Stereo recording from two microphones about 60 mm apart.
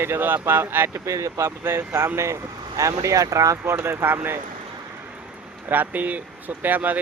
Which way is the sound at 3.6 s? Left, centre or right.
Right.